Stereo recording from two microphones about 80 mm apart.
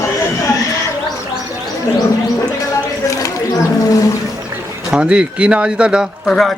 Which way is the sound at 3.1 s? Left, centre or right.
Left.